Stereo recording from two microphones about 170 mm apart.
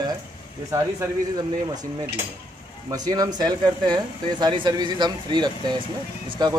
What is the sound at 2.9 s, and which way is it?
Speech, 20° right (ahead or behind).